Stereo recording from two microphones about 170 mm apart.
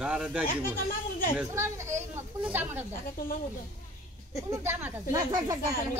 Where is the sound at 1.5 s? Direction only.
15° right (ahead or behind).